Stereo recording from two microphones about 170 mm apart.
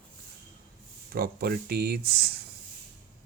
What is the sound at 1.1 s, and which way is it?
Speech, 60° right (ahead or behind).